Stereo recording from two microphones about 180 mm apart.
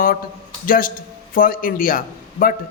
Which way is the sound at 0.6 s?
50° left (ahead or behind).